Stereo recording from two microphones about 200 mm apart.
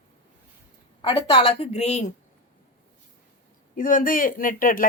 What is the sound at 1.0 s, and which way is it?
A woman's voice, 25° left (ahead or behind).